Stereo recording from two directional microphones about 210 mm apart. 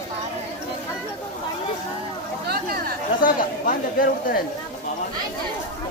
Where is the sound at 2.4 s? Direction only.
45° right (ahead or behind).